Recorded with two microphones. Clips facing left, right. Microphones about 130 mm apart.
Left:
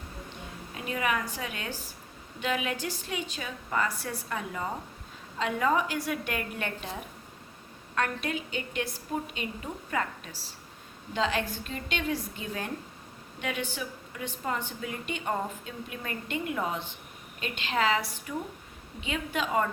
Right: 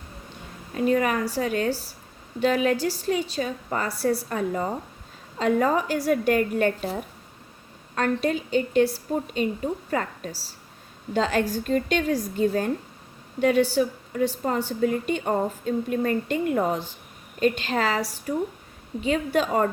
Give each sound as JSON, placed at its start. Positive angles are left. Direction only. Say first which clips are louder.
{"t": 0.7, "sound": "a woman's voice", "louder": "right 8 dB", "side_deg": -45}
{"t": 7.9, "sound": "a woman's voice", "louder": "right 7 dB", "side_deg": -35}